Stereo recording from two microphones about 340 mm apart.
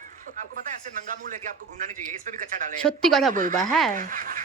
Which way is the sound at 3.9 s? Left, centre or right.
Right.